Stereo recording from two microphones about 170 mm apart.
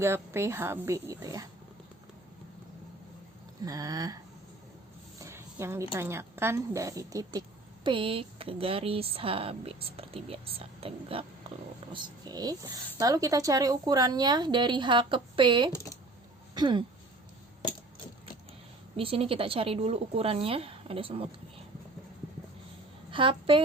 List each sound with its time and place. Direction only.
0.0 s a woman's voice: 15° right (ahead or behind)
3.6 s speech: 20° right (ahead or behind)
5.2 s a woman's voice: 15° right (ahead or behind)
7.9 s speech: 30° right (ahead or behind)
18.9 s speech: 35° right (ahead or behind)
23.1 s speech: 30° right (ahead or behind)